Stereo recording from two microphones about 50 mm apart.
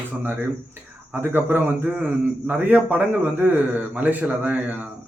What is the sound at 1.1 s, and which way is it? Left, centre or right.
A man's voice, right.